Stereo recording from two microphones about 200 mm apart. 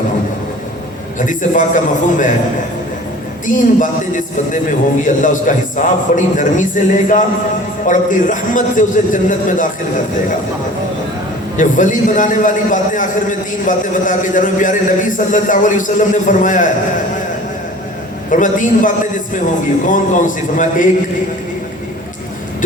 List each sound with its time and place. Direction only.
1.2 s a man's voice: 40° left (ahead or behind)
3.4 s a man's voice: 40° left (ahead or behind)
11.5 s a man's voice: 40° left (ahead or behind)
18.3 s a man's voice: 40° left (ahead or behind)